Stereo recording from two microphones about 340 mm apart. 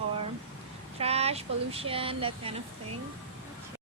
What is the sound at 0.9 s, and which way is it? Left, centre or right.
Speech, centre.